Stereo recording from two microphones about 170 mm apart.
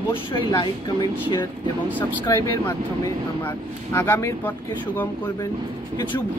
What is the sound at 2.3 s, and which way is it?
Speech, 15° left (ahead or behind).